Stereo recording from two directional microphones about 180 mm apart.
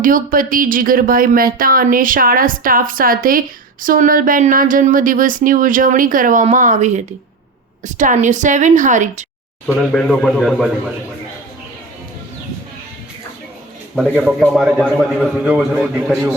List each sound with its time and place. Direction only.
0.0 s speech: 50° right (ahead or behind)
9.7 s a man's voice: 5° left (ahead or behind)
13.9 s a man's voice: 5° right (ahead or behind)